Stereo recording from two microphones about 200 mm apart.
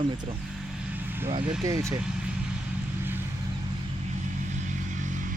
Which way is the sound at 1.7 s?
15° right (ahead or behind).